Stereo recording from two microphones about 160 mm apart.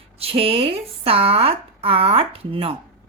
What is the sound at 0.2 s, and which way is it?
Speech, 35° right (ahead or behind).